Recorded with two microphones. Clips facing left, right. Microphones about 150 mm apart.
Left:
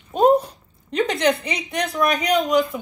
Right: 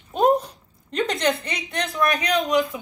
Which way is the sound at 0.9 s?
5° left (ahead or behind).